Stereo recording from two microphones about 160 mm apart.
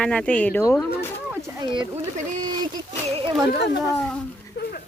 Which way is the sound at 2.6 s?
30° right (ahead or behind).